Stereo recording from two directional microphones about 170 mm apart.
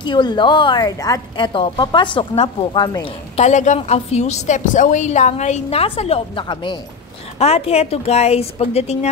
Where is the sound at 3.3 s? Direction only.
45° left (ahead or behind).